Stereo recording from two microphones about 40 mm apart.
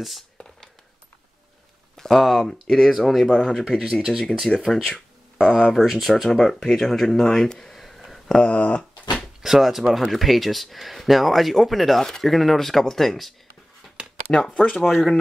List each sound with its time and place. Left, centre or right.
2.0 s speech: centre
3.3 s speech: centre
3.5 s speech: centre
4.7 s speech: centre
5.6 s speech: centre
6.3 s speech: centre
7.7 s a sound: centre
8.4 s speech: left
9.1 s speech: centre
14.0 s a sound: right
14.5 s speech: left
14.9 s speech: centre